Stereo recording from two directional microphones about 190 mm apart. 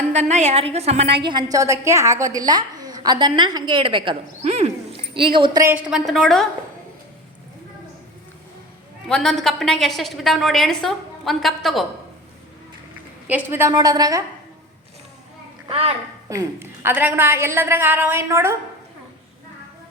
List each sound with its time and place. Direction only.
0.1 s a woman's voice: 35° right (ahead or behind)
5.6 s a woman's voice: 5° right (ahead or behind)
9.0 s a woman's voice: 5° left (ahead or behind)
13.2 s a woman's voice: 10° right (ahead or behind)
15.7 s a woman's voice: 30° right (ahead or behind)
16.3 s a woman's voice: 15° right (ahead or behind)